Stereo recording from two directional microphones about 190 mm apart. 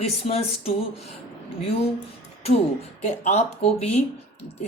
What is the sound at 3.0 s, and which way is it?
Speech, 40° left (ahead or behind).